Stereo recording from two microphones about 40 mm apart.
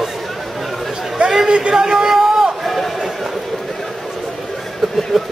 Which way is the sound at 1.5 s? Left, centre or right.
Right.